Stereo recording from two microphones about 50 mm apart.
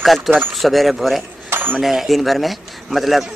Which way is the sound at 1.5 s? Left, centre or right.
Right.